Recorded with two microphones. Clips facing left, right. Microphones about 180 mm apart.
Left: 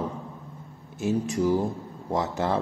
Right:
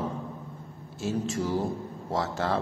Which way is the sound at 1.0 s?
15° left (ahead or behind).